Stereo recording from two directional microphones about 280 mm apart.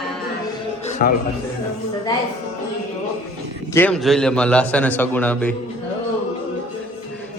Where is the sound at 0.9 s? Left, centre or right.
Left.